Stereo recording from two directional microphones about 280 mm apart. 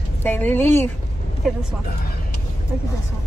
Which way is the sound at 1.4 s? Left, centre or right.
Centre.